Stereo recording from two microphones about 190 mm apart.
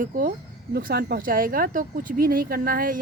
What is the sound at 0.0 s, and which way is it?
Speech, 45° right (ahead or behind).